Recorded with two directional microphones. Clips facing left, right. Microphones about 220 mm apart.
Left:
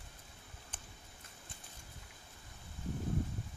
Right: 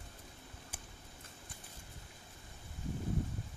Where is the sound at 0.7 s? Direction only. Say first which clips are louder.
Even; 10° right (ahead or behind).